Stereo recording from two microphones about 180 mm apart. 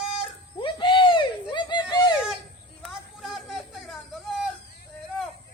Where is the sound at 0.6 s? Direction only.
25° left (ahead or behind).